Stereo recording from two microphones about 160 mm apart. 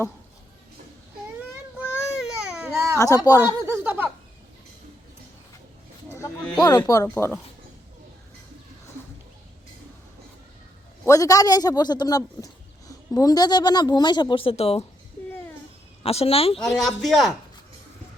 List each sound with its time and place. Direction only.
2.0 s baby cry: 5° right (ahead or behind)
2.7 s baby cry: 15° right (ahead or behind)
3.0 s speech: 20° left (ahead or behind)
3.4 s a sound: 10° right (ahead or behind)
6.6 s speech: 20° left (ahead or behind)
11.0 s speech: 20° left (ahead or behind); by 14.8 s 40° left (ahead or behind)
16.0 s a woman's voice: 40° left (ahead or behind)
16.6 s a man's voice: centre (ahead or behind)